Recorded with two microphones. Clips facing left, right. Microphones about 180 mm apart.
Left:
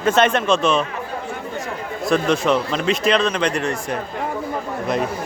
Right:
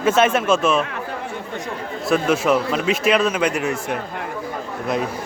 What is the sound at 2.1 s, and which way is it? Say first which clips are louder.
Speech: even; 5° right (ahead or behind).